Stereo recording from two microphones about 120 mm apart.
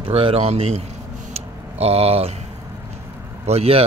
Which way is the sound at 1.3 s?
60° right (ahead or behind).